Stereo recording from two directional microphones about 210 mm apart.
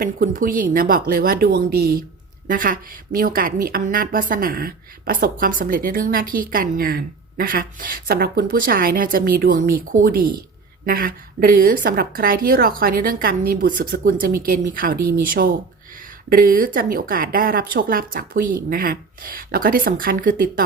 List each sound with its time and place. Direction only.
0.0 s a woman's voice: 40° right (ahead or behind)